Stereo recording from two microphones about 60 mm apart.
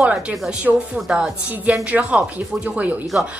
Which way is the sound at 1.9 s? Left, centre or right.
Right.